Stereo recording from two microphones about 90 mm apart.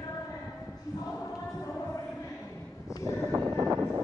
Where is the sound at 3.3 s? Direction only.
45° right (ahead or behind).